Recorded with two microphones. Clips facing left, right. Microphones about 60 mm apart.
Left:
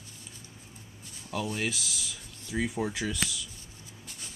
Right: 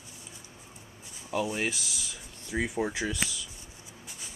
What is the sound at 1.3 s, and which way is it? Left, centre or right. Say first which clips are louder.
Speech: right 2 dB; right.